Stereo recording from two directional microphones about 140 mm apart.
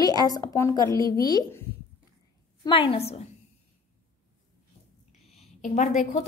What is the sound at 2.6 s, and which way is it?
Speech, 40° left (ahead or behind).